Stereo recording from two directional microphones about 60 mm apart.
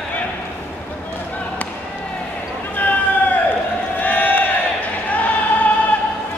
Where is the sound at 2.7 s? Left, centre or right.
Left.